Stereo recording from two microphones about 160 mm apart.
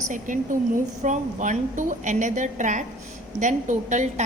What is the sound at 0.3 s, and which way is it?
A woman's voice, 50° right (ahead or behind).